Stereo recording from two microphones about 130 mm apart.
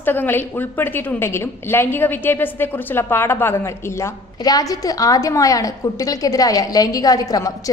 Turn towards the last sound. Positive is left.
turn(degrees=25)  # may be behind; listen again after turning